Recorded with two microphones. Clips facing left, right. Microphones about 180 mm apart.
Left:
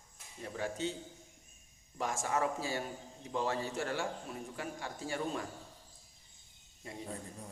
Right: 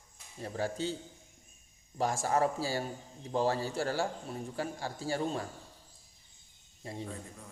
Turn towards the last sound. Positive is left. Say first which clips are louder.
# right 4 dB
turn(degrees=-30)  # may be behind; listen again after turning